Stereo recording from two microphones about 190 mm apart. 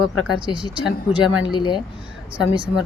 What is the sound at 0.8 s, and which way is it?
Speech, 5° right (ahead or behind).